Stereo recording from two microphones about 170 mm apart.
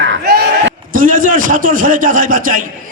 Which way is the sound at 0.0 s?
80° right.